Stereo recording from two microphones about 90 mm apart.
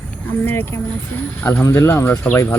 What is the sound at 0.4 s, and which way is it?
Speech, 25° left (ahead or behind).